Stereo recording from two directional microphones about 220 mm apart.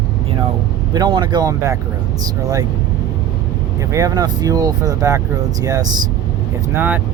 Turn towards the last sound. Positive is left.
turn(degrees=-10)  # may be behind; listen again after turning